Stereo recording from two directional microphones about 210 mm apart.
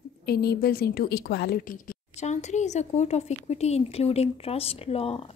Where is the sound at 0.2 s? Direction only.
50° left (ahead or behind).